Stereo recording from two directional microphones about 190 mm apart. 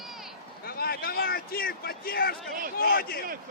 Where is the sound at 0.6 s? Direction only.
50° left (ahead or behind).